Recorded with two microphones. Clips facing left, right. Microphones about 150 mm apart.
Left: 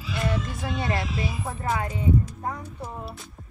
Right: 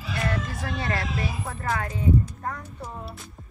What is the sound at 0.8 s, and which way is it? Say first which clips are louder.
Speech: left 1 dB; 20° left (ahead or behind).